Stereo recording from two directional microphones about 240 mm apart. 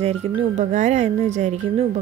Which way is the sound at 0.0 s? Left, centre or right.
Right.